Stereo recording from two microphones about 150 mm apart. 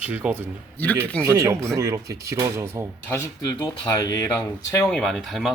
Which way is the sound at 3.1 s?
25° left (ahead or behind).